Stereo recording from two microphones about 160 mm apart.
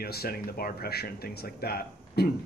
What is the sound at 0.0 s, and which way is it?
Speech, 75° left (ahead or behind).